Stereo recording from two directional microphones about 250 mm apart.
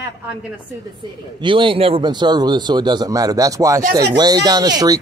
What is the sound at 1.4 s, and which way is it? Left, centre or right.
Speech, centre.